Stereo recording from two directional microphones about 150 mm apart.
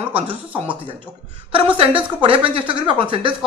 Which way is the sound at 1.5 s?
35° right (ahead or behind).